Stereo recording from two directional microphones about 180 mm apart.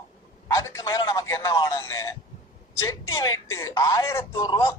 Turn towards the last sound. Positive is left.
turn(degrees=15)  # may be behind; listen again after turning